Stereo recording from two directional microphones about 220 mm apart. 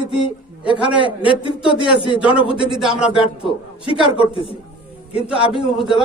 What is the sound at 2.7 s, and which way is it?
Speech, centre (ahead or behind).